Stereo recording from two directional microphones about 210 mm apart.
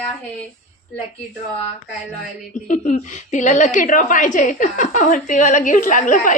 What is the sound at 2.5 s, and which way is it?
A woman's voice, 35° left (ahead or behind).